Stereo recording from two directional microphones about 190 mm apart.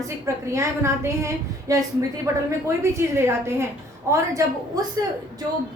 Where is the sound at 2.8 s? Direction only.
15° right (ahead or behind).